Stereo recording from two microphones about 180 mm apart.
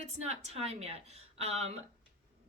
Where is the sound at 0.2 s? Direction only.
35° right (ahead or behind).